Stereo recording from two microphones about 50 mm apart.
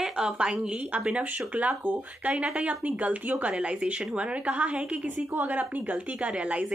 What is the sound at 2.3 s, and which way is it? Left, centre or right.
Speech, right.